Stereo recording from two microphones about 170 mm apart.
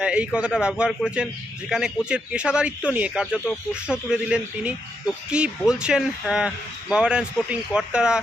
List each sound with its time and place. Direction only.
0.0 s speech: 5° right (ahead or behind)